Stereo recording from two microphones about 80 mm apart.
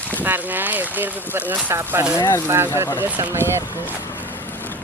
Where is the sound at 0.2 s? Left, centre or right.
Right.